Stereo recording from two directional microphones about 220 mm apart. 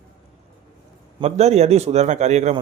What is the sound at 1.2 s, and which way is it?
A man's voice, 30° right (ahead or behind).